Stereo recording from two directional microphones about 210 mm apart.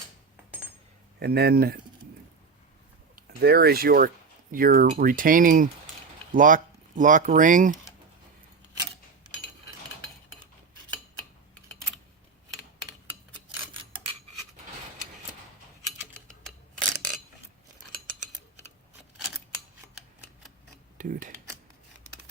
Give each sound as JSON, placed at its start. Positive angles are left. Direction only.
{"t": 1.2, "sound": "speech", "side_deg": -50}
{"t": 3.2, "sound": "speech", "side_deg": -50}
{"t": 21.0, "sound": "mechanisms", "side_deg": -40}